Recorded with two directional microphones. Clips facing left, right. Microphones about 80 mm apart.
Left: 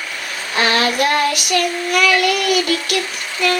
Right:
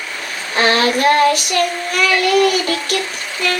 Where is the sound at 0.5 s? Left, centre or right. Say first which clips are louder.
Right 2 dB; right.